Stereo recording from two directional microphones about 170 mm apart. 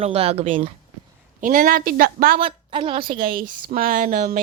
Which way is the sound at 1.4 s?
50° right (ahead or behind).